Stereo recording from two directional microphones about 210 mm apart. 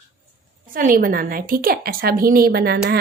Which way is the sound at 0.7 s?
40° right (ahead or behind).